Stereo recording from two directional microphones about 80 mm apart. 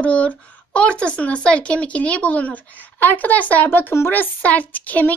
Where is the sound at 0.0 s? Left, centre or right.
Centre.